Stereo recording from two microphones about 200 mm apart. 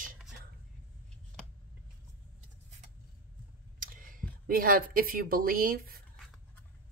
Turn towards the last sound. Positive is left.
turn(degrees=-45)  # may be behind; listen again after turning